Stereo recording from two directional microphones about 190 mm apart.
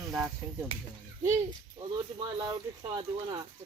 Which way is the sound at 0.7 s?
30° right (ahead or behind).